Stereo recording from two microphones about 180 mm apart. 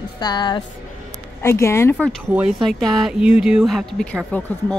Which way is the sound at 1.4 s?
15° left (ahead or behind).